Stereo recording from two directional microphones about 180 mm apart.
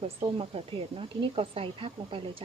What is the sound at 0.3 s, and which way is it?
Speech, 30° right (ahead or behind).